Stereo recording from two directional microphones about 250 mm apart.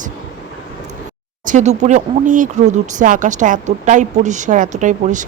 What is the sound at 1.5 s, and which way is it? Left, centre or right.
A woman's voice, right.